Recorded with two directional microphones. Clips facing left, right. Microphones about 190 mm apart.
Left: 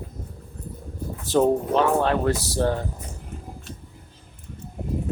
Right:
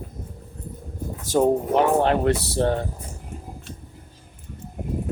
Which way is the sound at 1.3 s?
15° right (ahead or behind).